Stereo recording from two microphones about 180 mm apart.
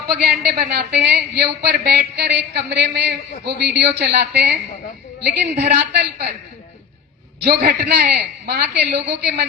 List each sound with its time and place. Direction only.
0.1 s a man's voice: 60° right (ahead or behind)
7.4 s a man's voice: 55° right (ahead or behind)